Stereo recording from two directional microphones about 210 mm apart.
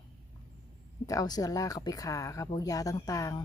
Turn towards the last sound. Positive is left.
turn(degrees=15)  # may be behind; listen again after turning